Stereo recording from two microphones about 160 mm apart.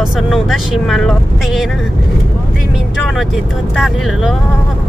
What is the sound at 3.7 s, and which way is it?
Speech, centre (ahead or behind).